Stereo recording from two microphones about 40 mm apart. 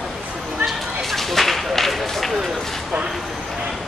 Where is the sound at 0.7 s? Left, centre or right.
Centre.